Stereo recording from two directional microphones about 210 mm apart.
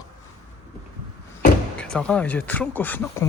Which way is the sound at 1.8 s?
5° left (ahead or behind).